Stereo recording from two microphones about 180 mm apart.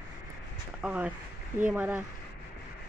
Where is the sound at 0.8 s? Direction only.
10° right (ahead or behind).